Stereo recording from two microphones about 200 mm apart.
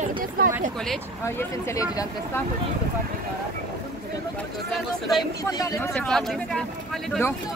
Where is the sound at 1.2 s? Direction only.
10° left (ahead or behind).